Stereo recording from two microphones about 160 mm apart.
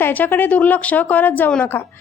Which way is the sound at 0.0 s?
10° left (ahead or behind).